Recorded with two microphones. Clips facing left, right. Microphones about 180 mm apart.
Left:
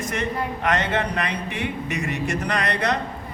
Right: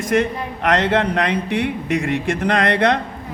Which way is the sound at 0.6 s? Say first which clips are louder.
Right 7 dB; 85° right.